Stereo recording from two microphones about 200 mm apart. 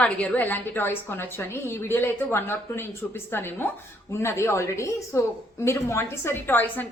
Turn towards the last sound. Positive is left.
turn(degrees=10)  # may be behind; listen again after turning